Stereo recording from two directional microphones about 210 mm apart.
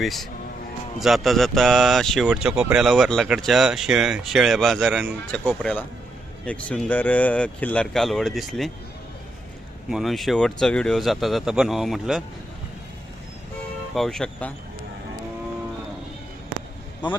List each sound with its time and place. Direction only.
0.0 s speech: centre (ahead or behind)
9.9 s speech: centre (ahead or behind)
13.9 s speech: centre (ahead or behind)
17.0 s speech: 20° left (ahead or behind)